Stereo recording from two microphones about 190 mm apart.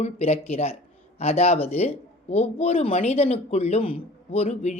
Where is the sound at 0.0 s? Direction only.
35° left (ahead or behind).